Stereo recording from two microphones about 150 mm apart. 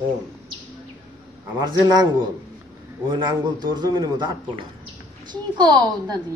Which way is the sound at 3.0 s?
30° right (ahead or behind).